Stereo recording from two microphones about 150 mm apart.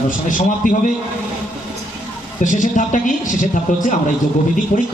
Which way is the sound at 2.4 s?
60° left (ahead or behind).